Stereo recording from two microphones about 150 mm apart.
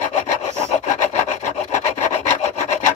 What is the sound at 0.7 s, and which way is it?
Wood, 55° left (ahead or behind).